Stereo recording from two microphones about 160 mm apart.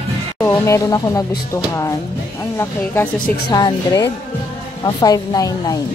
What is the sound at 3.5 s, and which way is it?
Speech, 25° left (ahead or behind).